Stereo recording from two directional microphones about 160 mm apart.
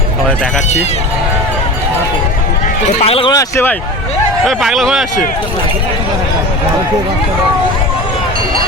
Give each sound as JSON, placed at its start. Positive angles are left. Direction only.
{"t": 3.0, "sound": "speech", "side_deg": 35}
{"t": 3.3, "sound": "speech", "side_deg": 15}
{"t": 4.4, "sound": "speech", "side_deg": 0}